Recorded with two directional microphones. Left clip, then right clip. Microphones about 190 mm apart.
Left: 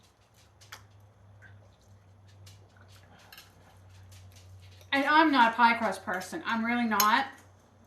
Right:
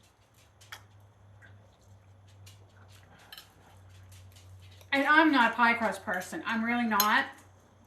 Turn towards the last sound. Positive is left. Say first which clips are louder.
# left 1 dB
turn(degrees=-15)  # may be behind; listen again after turning